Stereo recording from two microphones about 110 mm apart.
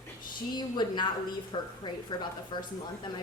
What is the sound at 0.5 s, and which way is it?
A woman's voice, 45° left (ahead or behind).